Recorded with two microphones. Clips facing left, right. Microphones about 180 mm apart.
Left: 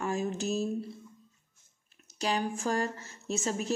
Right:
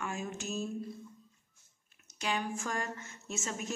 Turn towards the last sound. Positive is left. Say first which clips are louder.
# left 7 dB
turn(degrees=35)  # may be behind; listen again after turning